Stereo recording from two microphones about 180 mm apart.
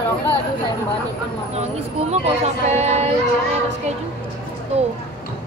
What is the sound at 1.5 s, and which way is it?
Speech, 35° right (ahead or behind).